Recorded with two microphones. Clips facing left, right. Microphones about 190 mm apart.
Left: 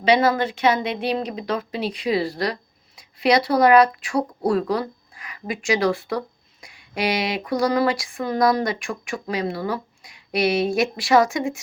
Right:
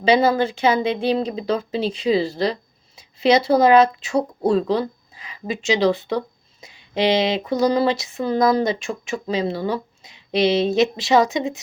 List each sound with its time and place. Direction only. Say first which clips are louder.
0.0 s speech: right 2 dB; 25° right (ahead or behind)